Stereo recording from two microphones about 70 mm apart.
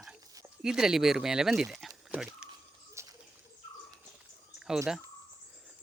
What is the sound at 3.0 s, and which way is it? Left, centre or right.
Bird, right.